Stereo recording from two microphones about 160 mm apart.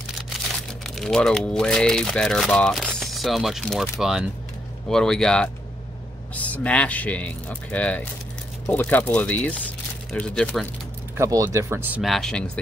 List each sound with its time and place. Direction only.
0.8 s speech: 5° left (ahead or behind)
11.1 s speech: 20° right (ahead or behind)
12.0 s speech: centre (ahead or behind)